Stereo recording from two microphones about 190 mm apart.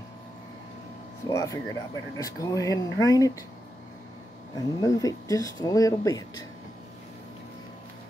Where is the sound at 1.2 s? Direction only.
15° left (ahead or behind).